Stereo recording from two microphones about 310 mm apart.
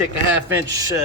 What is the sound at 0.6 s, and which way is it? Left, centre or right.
Speech, centre.